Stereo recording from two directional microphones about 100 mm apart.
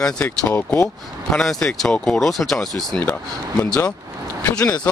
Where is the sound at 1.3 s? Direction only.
5° left (ahead or behind).